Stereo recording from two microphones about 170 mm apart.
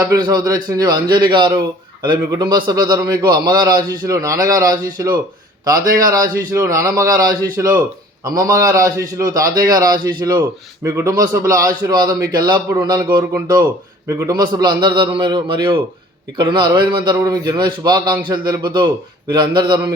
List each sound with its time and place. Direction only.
0.0 s a man's voice: 20° right (ahead or behind)
5.8 s speech: 55° right (ahead or behind)
6.1 s a man's voice: 20° right (ahead or behind)